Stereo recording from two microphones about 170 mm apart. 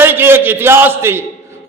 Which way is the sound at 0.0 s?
15° right (ahead or behind).